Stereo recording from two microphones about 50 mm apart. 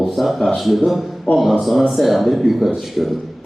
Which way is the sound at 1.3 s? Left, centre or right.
Left.